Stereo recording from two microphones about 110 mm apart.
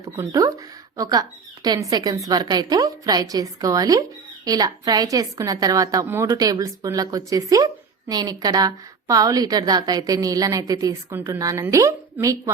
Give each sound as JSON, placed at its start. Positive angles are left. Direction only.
{"t": 0.0, "sound": "a woman's voice", "side_deg": -30}
{"t": 6.3, "sound": "a woman's voice", "side_deg": -35}